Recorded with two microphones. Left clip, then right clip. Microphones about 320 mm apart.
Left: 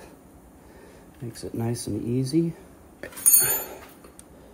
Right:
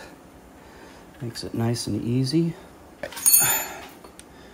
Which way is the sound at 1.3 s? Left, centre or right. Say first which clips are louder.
Right 3 dB; right.